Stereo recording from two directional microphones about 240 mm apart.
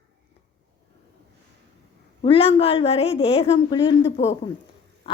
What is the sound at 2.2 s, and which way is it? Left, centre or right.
A woman's voice, left.